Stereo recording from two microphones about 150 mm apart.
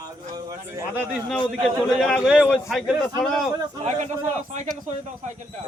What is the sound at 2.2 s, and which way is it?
Speech, 5° right (ahead or behind).